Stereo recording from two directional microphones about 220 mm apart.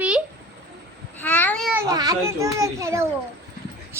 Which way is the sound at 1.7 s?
15° right (ahead or behind).